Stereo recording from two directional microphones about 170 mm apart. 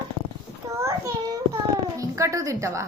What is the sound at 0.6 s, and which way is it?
A child's voice, 20° right (ahead or behind).